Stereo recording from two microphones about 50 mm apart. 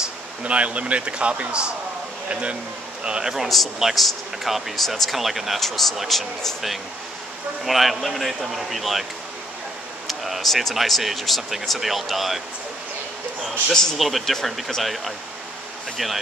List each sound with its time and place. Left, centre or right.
0.4 s speech: right
3.0 s a man's voice: centre
3.4 s speech: centre
10.0 s speech: centre
13.7 s a man's voice: centre